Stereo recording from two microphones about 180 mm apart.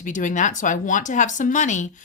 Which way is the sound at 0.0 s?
45° left (ahead or behind).